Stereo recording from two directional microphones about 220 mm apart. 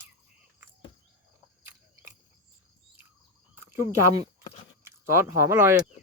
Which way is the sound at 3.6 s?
10° right (ahead or behind).